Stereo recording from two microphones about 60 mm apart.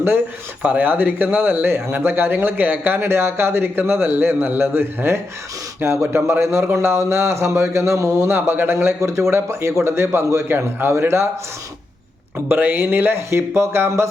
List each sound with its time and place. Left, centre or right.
0.6 s speech: right
5.8 s speech: right
12.5 s speech: right